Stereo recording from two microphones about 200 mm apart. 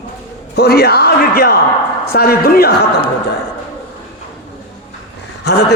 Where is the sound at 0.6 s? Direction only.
50° left (ahead or behind).